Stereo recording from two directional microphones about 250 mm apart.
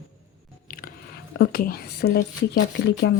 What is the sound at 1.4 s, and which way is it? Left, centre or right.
Speech, left.